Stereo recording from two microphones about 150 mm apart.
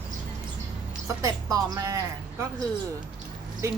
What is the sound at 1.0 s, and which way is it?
Speech, 20° right (ahead or behind).